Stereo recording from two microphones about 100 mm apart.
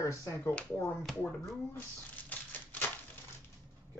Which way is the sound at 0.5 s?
20° left (ahead or behind).